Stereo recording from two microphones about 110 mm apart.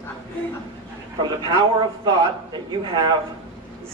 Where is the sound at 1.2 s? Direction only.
40° right (ahead or behind).